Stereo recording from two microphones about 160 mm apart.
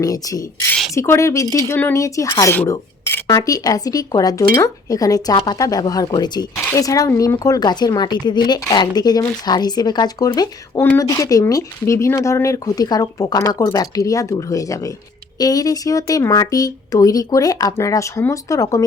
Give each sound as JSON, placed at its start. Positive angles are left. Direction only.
{"t": 0.0, "sound": "speech", "side_deg": 20}